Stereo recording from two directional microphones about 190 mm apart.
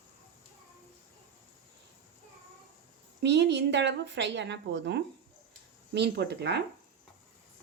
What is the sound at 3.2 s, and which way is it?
A woman's voice, 65° right (ahead or behind).